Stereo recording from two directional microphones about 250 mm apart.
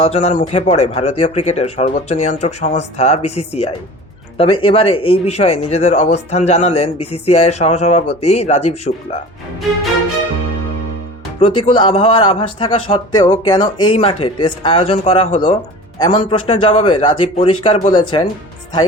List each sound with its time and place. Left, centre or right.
0.0 s speech: left
11.3 s speech: left